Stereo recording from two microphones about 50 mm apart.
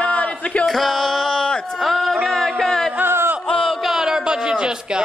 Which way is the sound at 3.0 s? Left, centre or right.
Right.